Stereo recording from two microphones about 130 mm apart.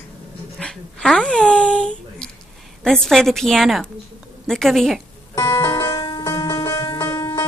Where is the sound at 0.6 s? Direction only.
5° left (ahead or behind).